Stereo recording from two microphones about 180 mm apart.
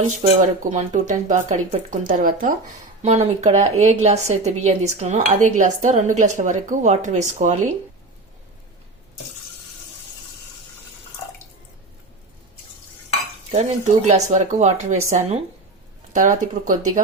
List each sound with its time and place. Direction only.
0.7 s a woman's voice: 40° right (ahead or behind)
13.5 s a woman's voice: 40° right (ahead or behind)